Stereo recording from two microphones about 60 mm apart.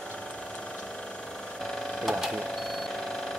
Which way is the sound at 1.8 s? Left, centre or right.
Centre.